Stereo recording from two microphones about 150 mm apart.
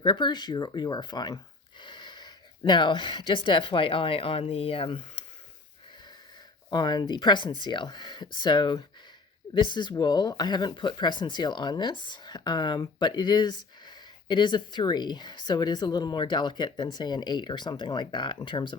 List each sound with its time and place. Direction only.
0.0 s speech: 35° left (ahead or behind)
6.7 s speech: 30° left (ahead or behind)